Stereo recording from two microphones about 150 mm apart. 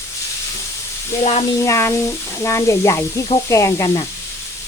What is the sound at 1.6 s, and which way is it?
Speech, 20° left (ahead or behind).